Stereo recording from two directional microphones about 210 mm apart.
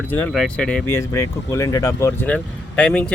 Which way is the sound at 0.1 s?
5° left (ahead or behind).